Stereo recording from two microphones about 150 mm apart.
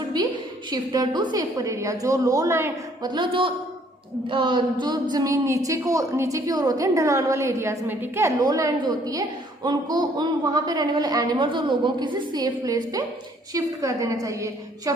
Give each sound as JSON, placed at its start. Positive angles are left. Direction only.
{"t": 0.1, "sound": "a sound", "side_deg": -25}
{"t": 0.7, "sound": "a woman's voice", "side_deg": -30}
{"t": 3.0, "sound": "a child's voice", "side_deg": -30}